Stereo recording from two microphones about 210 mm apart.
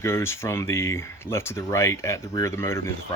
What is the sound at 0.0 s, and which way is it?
Speech, 10° left (ahead or behind).